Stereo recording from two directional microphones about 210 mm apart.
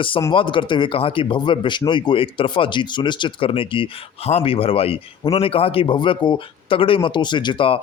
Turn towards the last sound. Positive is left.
turn(degrees=25)  # may be behind; listen again after turning